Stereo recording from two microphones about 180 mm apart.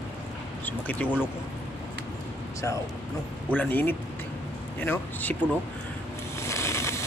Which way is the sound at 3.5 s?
10° left (ahead or behind).